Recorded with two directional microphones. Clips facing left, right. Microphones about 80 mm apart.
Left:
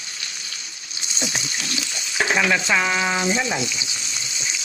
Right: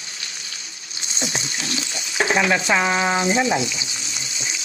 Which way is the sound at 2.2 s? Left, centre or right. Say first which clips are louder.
Right 1 dB; right.